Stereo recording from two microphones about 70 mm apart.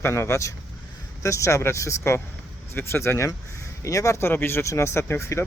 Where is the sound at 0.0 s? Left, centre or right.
Left.